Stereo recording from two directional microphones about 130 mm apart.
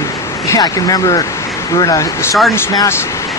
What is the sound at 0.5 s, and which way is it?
Speech, 25° left (ahead or behind).